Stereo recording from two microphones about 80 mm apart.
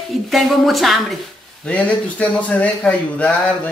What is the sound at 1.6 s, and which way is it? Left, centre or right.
Speech, centre.